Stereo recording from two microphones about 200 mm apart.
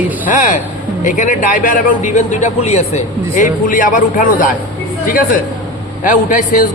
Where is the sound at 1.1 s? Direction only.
40° left (ahead or behind).